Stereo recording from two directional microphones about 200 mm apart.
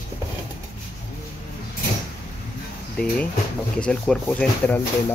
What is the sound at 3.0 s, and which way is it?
Speech, 5° left (ahead or behind).